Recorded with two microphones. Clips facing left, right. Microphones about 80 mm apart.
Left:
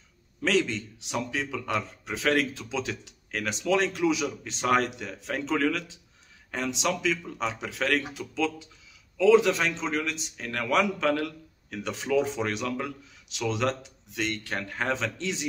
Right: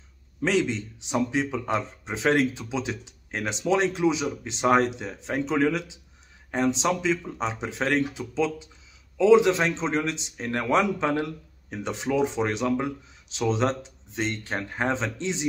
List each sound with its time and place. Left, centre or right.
0.4 s speech: centre